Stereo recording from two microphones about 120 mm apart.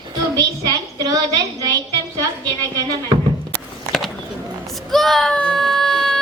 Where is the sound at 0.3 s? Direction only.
30° right (ahead or behind).